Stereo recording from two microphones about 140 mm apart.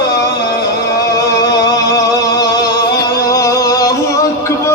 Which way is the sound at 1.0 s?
25° left (ahead or behind).